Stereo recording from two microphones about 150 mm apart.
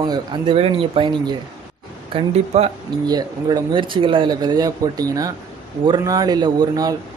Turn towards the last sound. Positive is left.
turn(degrees=-25)  # may be behind; listen again after turning